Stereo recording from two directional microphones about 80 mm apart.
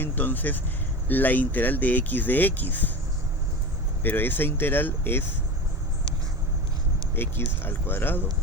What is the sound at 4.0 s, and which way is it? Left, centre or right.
Speech, left.